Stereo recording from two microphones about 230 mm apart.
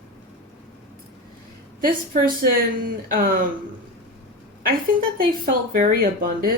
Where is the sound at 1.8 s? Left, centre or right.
Right.